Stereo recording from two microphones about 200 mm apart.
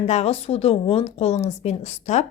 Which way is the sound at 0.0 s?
35° left (ahead or behind).